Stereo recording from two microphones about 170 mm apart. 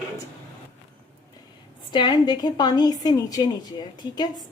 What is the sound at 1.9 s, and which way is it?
A woman's voice, 25° left (ahead or behind).